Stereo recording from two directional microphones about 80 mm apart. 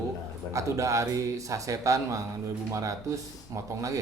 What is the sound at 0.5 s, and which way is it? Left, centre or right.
A man's voice, right.